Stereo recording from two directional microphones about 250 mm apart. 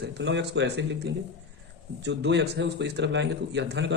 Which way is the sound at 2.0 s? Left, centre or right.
Right.